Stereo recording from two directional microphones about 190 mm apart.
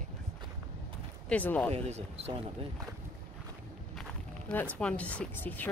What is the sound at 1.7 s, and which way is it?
Speech, 35° right (ahead or behind).